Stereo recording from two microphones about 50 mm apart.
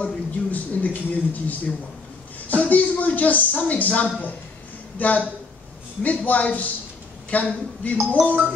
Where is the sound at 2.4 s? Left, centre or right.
Left.